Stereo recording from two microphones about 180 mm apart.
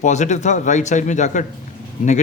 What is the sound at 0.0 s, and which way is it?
Speech, 40° left (ahead or behind).